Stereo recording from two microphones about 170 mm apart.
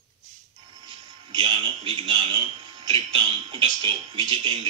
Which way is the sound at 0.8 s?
30° right (ahead or behind).